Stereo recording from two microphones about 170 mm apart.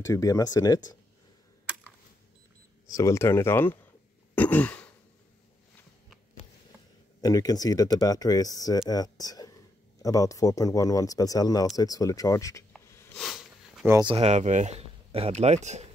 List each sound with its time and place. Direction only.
0.0 s speech: 20° left (ahead or behind)
2.9 s speech: 20° left (ahead or behind)
4.4 s throat clearing: 10° left (ahead or behind)
7.2 s speech: 20° left (ahead or behind)
13.1 s sniff: centre (ahead or behind)
14.0 s speech: 35° right (ahead or behind)